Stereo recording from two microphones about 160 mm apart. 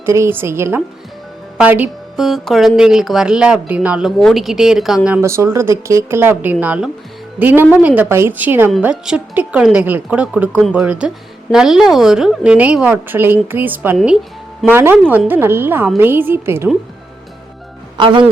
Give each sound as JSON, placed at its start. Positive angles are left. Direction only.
{"t": 0.0, "sound": "speech", "side_deg": -15}
{"t": 17.9, "sound": "speech", "side_deg": -30}